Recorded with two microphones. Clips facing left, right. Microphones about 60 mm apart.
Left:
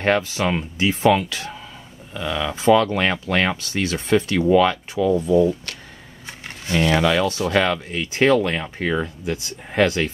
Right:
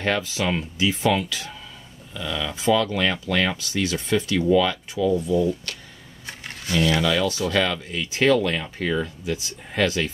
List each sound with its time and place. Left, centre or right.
0.0 s speech: left
6.2 s speech: left